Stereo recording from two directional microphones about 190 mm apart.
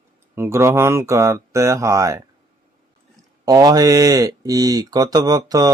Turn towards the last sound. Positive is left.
turn(degrees=-20)  # may be behind; listen again after turning